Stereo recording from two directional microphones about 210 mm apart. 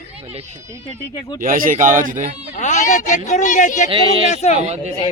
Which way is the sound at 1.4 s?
40° right (ahead or behind).